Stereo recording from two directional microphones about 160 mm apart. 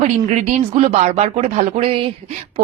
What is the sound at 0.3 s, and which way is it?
A woman's voice, 45° right (ahead or behind).